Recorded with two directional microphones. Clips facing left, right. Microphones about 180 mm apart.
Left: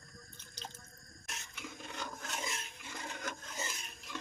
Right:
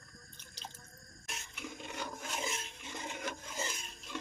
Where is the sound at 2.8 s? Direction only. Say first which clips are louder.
Right 2 dB; 20° right (ahead or behind); by 3.7 s 5° right (ahead or behind).